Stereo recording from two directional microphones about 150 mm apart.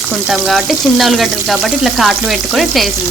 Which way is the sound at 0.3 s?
Centre (ahead or behind).